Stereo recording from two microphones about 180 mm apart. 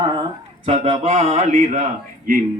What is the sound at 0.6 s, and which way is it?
A man's voice, 35° right (ahead or behind).